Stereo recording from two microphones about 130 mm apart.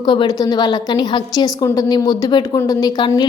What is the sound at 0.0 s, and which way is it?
A woman's voice, 35° left (ahead or behind).